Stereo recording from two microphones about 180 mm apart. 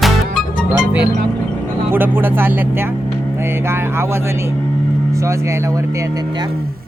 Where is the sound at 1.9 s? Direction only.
10° right (ahead or behind).